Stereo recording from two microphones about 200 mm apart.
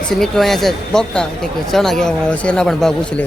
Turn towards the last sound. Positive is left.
turn(degrees=5)  # may be behind; listen again after turning